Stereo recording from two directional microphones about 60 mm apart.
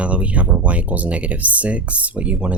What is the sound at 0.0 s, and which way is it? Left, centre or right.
Speech, right.